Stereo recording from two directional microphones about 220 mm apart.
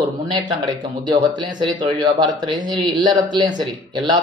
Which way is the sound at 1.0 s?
20° right (ahead or behind).